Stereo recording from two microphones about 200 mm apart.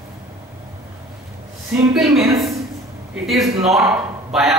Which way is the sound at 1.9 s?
Centre (ahead or behind).